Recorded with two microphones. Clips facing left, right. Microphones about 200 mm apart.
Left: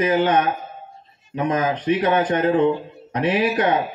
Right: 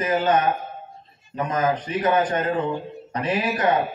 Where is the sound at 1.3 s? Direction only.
70° left (ahead or behind).